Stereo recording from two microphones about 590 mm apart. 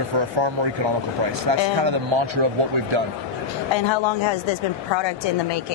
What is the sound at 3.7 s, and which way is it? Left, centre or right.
Speech, left.